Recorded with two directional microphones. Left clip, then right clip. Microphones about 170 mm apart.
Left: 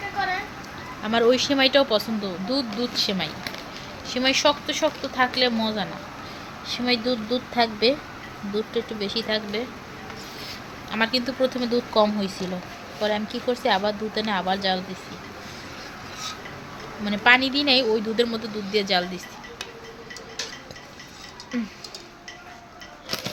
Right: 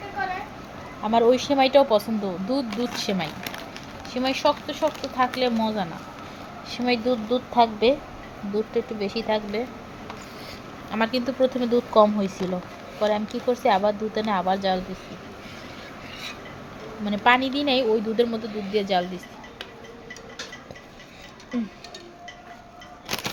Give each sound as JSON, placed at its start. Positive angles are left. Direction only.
{"t": 1.0, "sound": "a woman's voice", "side_deg": 0}
{"t": 4.1, "sound": "a woman's voice", "side_deg": 0}
{"t": 10.8, "sound": "speech", "side_deg": -15}
{"t": 17.1, "sound": "a woman's voice", "side_deg": -5}
{"t": 21.5, "sound": "a woman's voice", "side_deg": -5}
{"t": 23.0, "sound": "a sound", "side_deg": -60}